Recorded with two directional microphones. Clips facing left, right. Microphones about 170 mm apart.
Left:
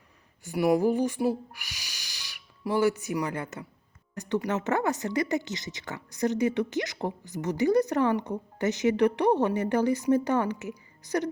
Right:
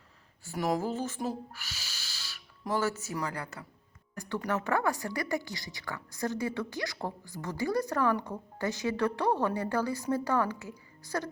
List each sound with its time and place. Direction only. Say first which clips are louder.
0.4 s speech: left 7 dB; 15° left (ahead or behind)